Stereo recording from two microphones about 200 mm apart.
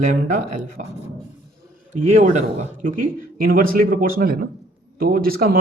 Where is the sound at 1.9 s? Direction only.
35° right (ahead or behind).